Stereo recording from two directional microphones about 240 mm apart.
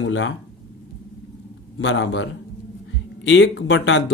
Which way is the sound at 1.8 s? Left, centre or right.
Left.